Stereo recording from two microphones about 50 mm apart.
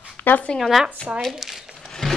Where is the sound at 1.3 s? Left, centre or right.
Centre.